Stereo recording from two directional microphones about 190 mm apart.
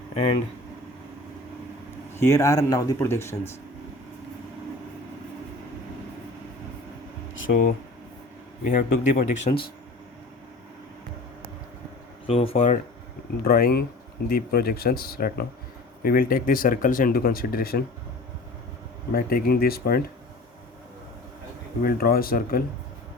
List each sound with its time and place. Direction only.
2.1 s speech: 15° left (ahead or behind)
7.5 s speech: 55° left (ahead or behind)
8.6 s speech: 45° left (ahead or behind)
9.5 s speech: 35° left (ahead or behind)
12.3 s speech: 30° left (ahead or behind)
13.4 s speech: 50° left (ahead or behind)
19.1 s speech: 55° left (ahead or behind)
21.8 s speech: 50° left (ahead or behind)